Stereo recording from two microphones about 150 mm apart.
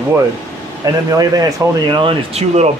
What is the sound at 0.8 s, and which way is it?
Speech, 25° right (ahead or behind).